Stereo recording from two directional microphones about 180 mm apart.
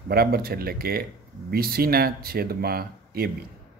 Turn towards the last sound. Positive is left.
turn(degrees=-60)  # may be behind; listen again after turning